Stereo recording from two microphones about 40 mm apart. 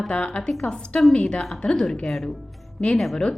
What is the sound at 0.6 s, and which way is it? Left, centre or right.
A woman's voice, left.